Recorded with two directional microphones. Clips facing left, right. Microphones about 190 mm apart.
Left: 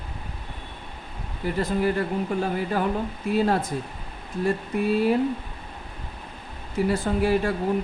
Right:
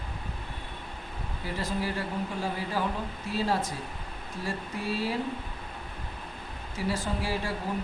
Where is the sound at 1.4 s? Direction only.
55° left (ahead or behind).